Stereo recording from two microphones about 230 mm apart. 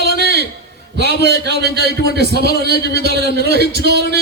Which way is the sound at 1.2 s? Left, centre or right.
Right.